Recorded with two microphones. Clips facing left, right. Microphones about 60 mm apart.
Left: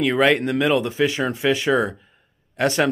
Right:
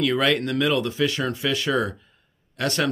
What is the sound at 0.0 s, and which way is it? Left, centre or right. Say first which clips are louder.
Speech: left 4 dB; left.